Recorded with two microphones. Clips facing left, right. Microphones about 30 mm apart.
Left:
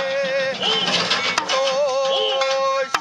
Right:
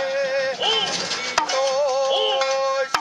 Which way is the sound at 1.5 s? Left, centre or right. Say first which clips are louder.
Left 2 dB; left.